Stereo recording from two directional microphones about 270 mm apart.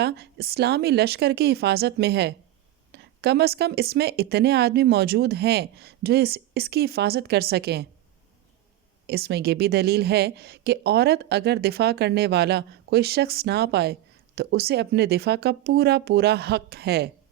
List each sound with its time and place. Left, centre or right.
0.0 s speech: right
9.0 s speech: right